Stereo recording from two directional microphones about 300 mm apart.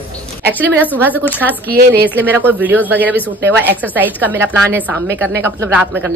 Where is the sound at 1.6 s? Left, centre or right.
Right.